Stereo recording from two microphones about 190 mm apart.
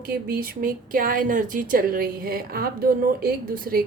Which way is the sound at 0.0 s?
50° right (ahead or behind).